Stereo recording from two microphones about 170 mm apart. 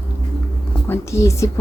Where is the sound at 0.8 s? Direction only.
15° left (ahead or behind).